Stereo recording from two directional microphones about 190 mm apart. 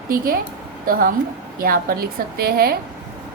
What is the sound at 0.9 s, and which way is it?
A woman's voice, 50° right (ahead or behind).